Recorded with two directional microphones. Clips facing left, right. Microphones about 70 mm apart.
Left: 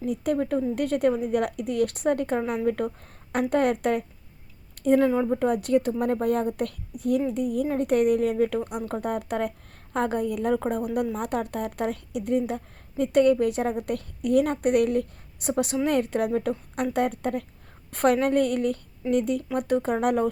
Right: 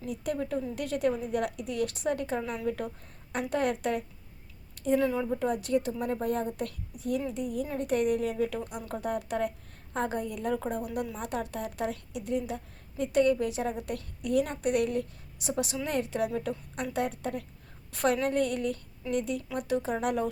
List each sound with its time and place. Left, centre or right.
0.0 s a woman's voice: left
2.4 s speech: left
2.6 s a woman's voice: left
4.7 s a sound: left
5.0 s speech: left
5.4 s a woman's voice: left